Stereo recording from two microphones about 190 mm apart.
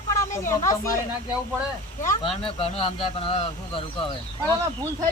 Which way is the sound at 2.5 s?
30° left (ahead or behind).